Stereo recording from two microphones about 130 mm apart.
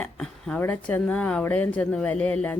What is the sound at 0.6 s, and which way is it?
A woman's voice, 15° left (ahead or behind).